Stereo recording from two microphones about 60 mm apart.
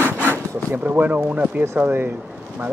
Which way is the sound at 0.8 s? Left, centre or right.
Right.